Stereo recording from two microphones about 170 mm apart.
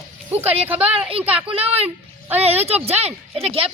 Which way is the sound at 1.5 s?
35° right (ahead or behind).